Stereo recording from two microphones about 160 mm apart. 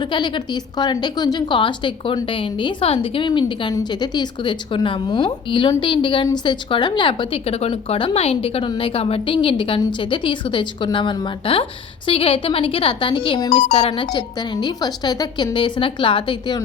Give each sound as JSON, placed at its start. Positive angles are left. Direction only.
{"t": 0.0, "sound": "a woman's voice", "side_deg": 30}